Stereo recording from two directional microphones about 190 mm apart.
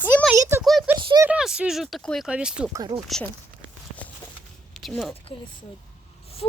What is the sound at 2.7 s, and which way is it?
Speech, 20° right (ahead or behind).